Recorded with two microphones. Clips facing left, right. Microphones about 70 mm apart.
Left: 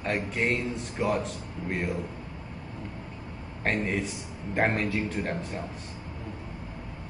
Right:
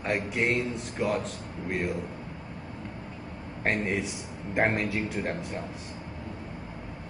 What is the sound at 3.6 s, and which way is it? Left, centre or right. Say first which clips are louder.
A man's voice: even; centre.